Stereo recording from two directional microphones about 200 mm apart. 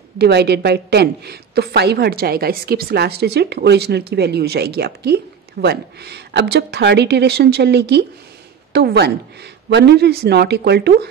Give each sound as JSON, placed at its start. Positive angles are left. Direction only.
{"t": 0.2, "sound": "a woman's voice", "side_deg": -55}